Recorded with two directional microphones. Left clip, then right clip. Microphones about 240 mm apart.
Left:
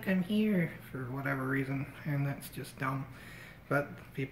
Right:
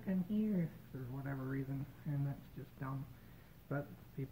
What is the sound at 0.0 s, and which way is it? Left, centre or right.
Speech, centre.